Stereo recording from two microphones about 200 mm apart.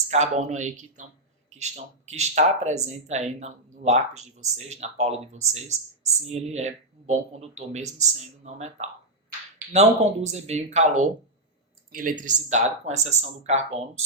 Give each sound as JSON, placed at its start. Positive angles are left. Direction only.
{"t": 0.1, "sound": "speech", "side_deg": -35}